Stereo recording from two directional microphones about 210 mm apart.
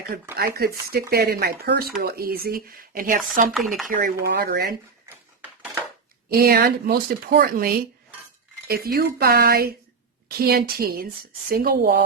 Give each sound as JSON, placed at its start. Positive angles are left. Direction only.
{"t": 0.3, "sound": "a woman's voice", "side_deg": -45}
{"t": 3.5, "sound": "speech", "side_deg": 0}
{"t": 3.8, "sound": "a woman's voice", "side_deg": -45}
{"t": 6.3, "sound": "a woman's voice", "side_deg": -45}